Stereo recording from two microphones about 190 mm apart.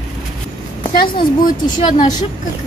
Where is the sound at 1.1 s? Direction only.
20° left (ahead or behind).